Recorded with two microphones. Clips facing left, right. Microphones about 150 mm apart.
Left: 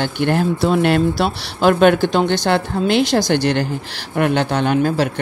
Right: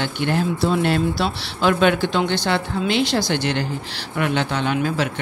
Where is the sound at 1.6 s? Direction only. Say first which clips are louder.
Left 5 dB; 50° left (ahead or behind).